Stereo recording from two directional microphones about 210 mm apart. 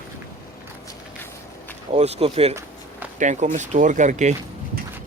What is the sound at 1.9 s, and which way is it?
Speech, 30° right (ahead or behind).